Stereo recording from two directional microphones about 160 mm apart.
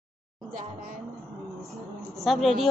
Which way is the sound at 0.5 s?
60° right (ahead or behind).